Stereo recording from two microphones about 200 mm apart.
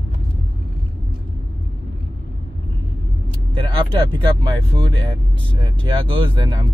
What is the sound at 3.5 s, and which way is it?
Speech, 25° right (ahead or behind).